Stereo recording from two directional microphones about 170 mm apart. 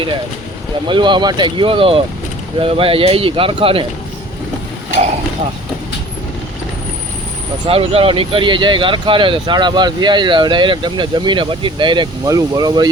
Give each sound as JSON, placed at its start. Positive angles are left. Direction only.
{"t": 0.9, "sound": "speech", "side_deg": -30}
{"t": 7.7, "sound": "speech", "side_deg": -35}